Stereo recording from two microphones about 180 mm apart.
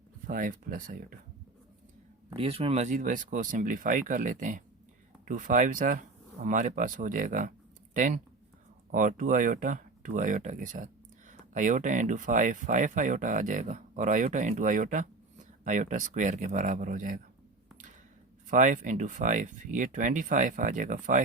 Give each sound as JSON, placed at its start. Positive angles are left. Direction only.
{"t": 0.3, "sound": "speech", "side_deg": -50}
{"t": 2.3, "sound": "speech", "side_deg": -35}
{"t": 18.4, "sound": "speech", "side_deg": -45}